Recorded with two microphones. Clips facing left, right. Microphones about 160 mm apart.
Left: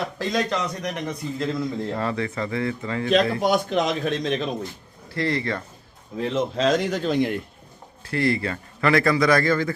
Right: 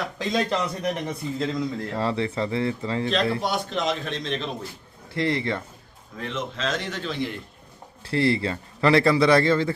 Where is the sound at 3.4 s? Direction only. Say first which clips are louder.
Left 5 dB; 45° left (ahead or behind).